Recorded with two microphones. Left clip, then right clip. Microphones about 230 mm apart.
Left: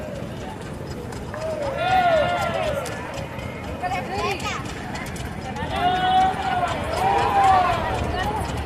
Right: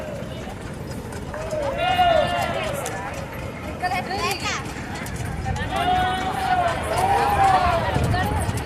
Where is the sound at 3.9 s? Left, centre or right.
Right.